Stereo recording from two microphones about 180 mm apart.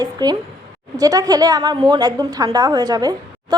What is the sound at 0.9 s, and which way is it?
A woman's voice, 20° right (ahead or behind).